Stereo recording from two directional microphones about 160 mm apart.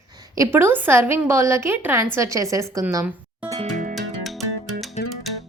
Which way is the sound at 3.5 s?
50° right (ahead or behind).